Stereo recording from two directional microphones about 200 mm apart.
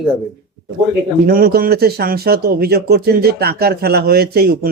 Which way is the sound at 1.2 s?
45° right (ahead or behind).